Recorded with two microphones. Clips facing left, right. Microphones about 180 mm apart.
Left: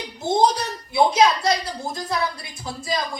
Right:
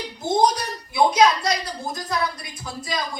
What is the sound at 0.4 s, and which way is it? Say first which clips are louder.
A woman's voice: left 1 dB; 25° left (ahead or behind).